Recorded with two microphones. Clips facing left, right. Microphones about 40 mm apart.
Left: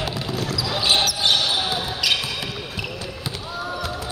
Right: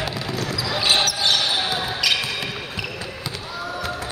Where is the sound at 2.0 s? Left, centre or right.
Centre.